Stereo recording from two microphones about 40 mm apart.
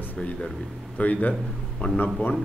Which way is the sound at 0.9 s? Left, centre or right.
Left.